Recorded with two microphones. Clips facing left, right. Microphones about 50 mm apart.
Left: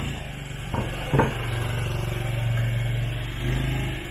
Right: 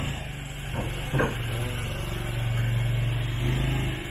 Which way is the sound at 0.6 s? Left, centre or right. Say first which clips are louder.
Left 4 dB; left.